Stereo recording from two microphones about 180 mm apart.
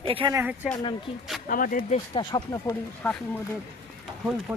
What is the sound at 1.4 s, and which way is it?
Speech, 50° left (ahead or behind).